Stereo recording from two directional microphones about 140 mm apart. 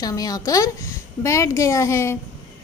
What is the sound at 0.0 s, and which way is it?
A woman's voice, 25° left (ahead or behind).